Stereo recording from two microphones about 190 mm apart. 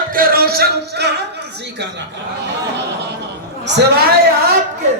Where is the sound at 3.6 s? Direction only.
60° right (ahead or behind).